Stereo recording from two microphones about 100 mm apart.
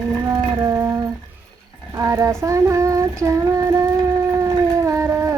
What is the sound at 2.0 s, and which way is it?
Female singing, 30° right (ahead or behind).